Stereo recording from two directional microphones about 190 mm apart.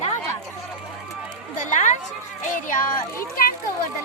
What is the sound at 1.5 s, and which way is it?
A woman's voice, 40° left (ahead or behind).